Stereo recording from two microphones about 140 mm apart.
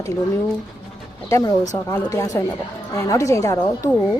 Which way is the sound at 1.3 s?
25° left (ahead or behind).